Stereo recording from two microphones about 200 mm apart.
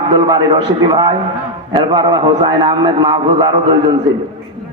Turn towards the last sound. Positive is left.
turn(degrees=-20)  # may be behind; listen again after turning